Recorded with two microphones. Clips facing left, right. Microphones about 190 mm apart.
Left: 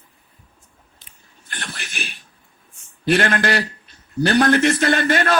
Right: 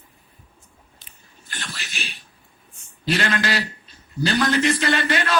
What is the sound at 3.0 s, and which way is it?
A man's voice, 55° left (ahead or behind).